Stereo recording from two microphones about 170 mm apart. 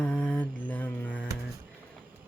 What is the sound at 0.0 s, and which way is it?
Mantra, 5° left (ahead or behind).